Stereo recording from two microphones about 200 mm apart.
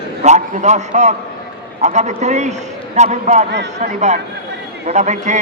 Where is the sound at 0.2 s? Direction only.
35° right (ahead or behind).